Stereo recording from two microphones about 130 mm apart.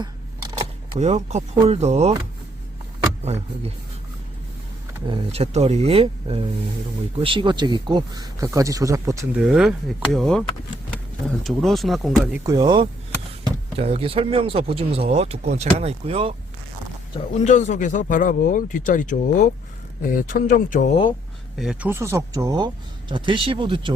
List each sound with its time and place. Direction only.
0.9 s speech: 60° right (ahead or behind)
5.0 s speech: 50° right (ahead or behind); by 9.1 s 25° right (ahead or behind)
9.3 s speech: 10° right (ahead or behind)
12.5 s speech: 35° right (ahead or behind)
13.7 s speech: 50° right (ahead or behind)
17.4 s speech: 65° left (ahead or behind)
20.0 s speech: 90° left
21.6 s speech: 5° right (ahead or behind)
21.8 s speech: 20° right (ahead or behind); by 23.9 s 40° right (ahead or behind)